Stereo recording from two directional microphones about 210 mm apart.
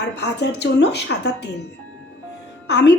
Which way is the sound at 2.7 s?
55° left (ahead or behind).